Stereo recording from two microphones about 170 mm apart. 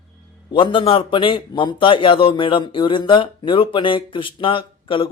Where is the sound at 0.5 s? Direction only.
30° left (ahead or behind).